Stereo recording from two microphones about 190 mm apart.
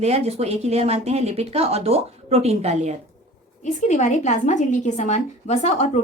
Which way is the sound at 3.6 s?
40° left (ahead or behind).